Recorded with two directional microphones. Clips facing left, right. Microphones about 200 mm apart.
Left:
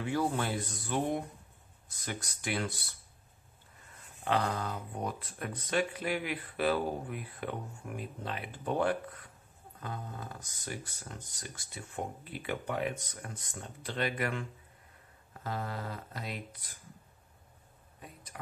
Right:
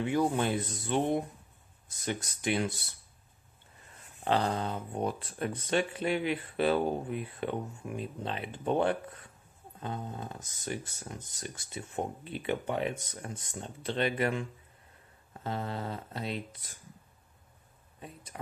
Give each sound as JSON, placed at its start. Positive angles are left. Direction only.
{"t": 0.0, "sound": "speech", "side_deg": -20}
{"t": 4.2, "sound": "speech", "side_deg": -30}
{"t": 15.4, "sound": "speech", "side_deg": -25}
{"t": 18.0, "sound": "a sound", "side_deg": -25}